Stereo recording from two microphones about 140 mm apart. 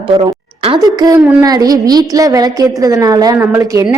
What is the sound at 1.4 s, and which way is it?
A woman's voice, 25° right (ahead or behind).